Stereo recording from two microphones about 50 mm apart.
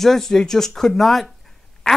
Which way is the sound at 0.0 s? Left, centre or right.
Centre.